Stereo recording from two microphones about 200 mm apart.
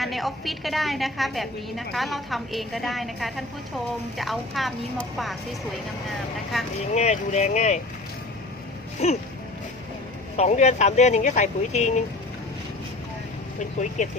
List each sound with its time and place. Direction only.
0.0 s a woman's voice: centre (ahead or behind)
6.9 s speech: 35° left (ahead or behind)
9.0 s speech: 35° left (ahead or behind)
10.3 s speech: 35° left (ahead or behind)
14.0 s speech: 40° left (ahead or behind)